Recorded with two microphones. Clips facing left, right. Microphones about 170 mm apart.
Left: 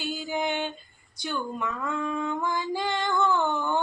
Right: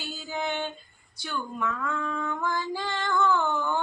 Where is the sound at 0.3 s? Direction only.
15° left (ahead or behind).